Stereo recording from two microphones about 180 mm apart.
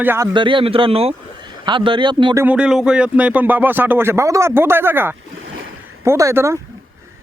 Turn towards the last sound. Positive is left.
turn(degrees=-15)  # may be behind; listen again after turning